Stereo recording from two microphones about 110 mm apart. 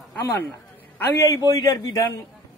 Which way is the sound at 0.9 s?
20° left (ahead or behind).